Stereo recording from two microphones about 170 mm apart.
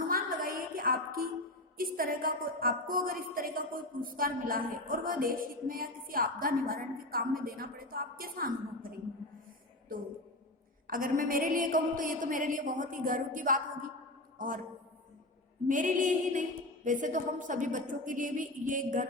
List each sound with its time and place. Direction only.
0.1 s a sound: 60° right (ahead or behind)
1.8 s a woman's voice: 55° right (ahead or behind)
10.8 s a woman's voice: 55° right (ahead or behind)
15.6 s speech: 50° right (ahead or behind)